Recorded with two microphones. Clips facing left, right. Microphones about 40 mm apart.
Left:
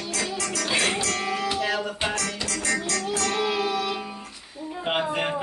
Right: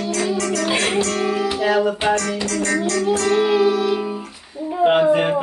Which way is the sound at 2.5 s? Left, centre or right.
Centre.